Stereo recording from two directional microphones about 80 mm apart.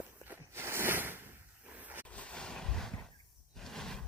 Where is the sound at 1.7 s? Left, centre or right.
Right.